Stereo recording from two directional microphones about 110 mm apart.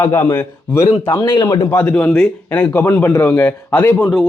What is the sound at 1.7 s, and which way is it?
Speech, 15° left (ahead or behind).